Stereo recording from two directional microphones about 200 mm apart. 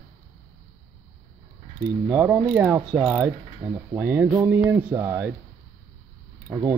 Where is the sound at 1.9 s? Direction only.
10° right (ahead or behind).